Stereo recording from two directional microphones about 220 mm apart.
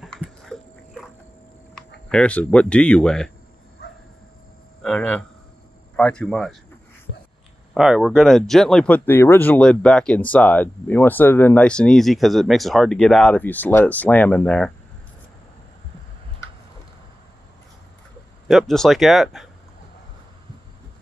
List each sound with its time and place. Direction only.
0.0 s dog: centre (ahead or behind)
2.0 s speech: 5° left (ahead or behind)
4.8 s cricket: 5° left (ahead or behind)
5.9 s speech: 5° left (ahead or behind)
7.7 s speech: centre (ahead or behind)
18.5 s speech: centre (ahead or behind)